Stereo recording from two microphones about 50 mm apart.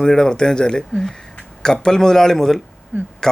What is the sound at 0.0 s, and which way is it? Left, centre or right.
Speech, centre.